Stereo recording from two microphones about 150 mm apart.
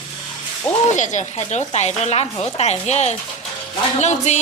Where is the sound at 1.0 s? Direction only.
55° left (ahead or behind).